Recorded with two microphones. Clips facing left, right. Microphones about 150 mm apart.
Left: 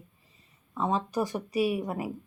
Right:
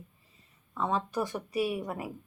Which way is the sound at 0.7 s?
20° left (ahead or behind).